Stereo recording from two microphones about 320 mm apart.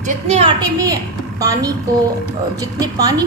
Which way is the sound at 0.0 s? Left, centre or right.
Centre.